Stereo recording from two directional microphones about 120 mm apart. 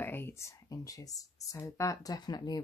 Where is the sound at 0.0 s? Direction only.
15° left (ahead or behind).